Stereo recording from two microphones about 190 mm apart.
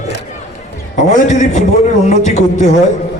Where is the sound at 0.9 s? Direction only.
40° left (ahead or behind).